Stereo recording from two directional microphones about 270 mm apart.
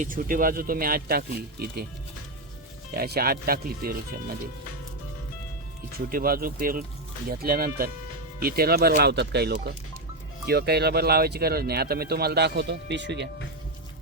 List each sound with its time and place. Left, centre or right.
0.0 s speech: right
2.9 s speech: right
6.1 s speech: right